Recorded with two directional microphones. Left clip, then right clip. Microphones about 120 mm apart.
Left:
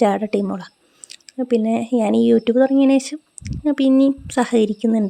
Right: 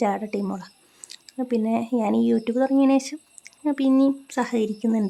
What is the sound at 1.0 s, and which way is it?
Speech, 25° left (ahead or behind).